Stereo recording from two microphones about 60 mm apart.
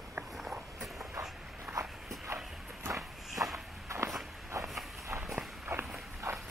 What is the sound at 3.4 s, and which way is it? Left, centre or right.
Walk, right.